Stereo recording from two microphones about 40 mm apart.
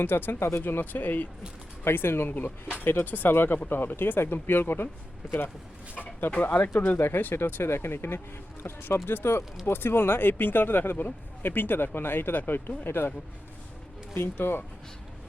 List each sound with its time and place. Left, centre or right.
0.0 s speech: left
1.8 s speech: left
2.8 s speech: left
3.3 s speech: left
6.0 s speech: left
7.0 s speech: left
8.6 s speech: left
9.6 s speech: left
12.3 s speech: left
14.2 s speech: left